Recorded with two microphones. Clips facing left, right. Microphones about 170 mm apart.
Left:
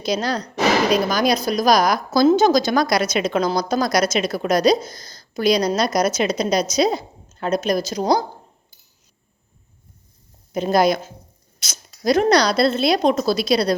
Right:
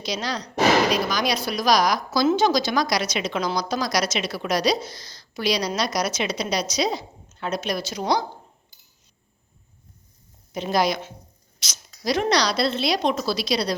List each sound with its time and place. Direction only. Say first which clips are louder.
0.0 s a woman's voice: left 6 dB; 50° left (ahead or behind)
10.5 s a woman's voice: left 5 dB; 50° left (ahead or behind)